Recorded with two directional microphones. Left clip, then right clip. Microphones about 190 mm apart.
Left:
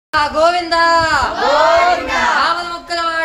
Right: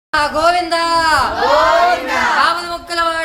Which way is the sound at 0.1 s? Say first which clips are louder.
Even; 5° right (ahead or behind).